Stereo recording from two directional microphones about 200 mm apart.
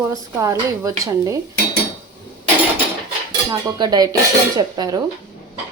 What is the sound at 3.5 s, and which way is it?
Cutlery, 20° right (ahead or behind).